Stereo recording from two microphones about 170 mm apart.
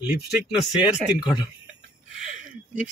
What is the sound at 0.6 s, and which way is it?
Speech, 5° right (ahead or behind).